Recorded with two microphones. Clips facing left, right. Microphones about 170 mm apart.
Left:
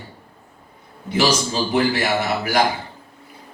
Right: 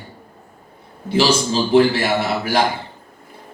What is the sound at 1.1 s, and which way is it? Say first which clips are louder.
Speech: right 3 dB; 30° right (ahead or behind).